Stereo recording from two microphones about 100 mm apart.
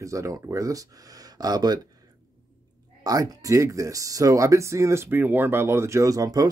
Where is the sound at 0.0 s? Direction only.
30° right (ahead or behind).